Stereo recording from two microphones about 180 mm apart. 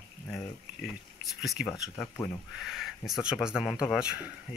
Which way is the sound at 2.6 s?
Centre (ahead or behind).